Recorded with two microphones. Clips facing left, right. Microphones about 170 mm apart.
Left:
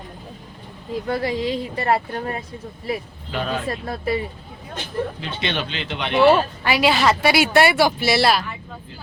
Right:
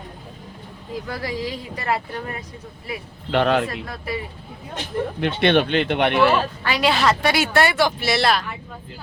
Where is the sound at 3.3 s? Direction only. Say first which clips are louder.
Right 7 dB; 70° right (ahead or behind).